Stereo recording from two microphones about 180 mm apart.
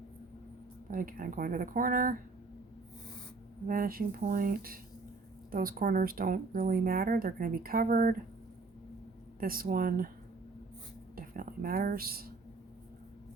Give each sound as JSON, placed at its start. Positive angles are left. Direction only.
{"t": 0.9, "sound": "speech", "side_deg": -50}
{"t": 3.7, "sound": "speech", "side_deg": -55}
{"t": 9.4, "sound": "speech", "side_deg": -55}
{"t": 11.1, "sound": "a sound", "side_deg": -55}